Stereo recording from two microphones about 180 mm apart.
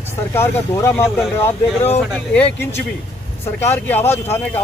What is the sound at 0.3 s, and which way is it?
Speech, 15° left (ahead or behind).